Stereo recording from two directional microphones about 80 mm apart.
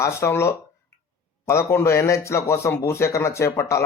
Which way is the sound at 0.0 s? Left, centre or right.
Left.